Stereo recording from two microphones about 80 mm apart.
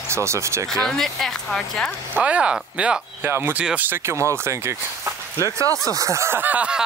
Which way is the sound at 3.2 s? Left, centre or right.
Right.